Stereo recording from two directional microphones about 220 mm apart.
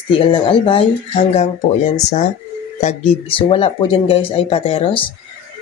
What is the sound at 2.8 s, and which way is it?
Speech, 30° left (ahead or behind).